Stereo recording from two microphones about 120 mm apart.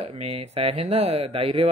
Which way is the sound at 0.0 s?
60° right (ahead or behind).